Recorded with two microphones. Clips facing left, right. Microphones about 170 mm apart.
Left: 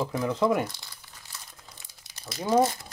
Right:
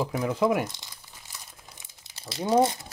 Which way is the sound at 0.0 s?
10° right (ahead or behind).